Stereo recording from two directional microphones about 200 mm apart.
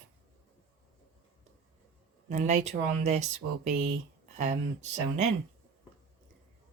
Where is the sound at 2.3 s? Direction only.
35° right (ahead or behind).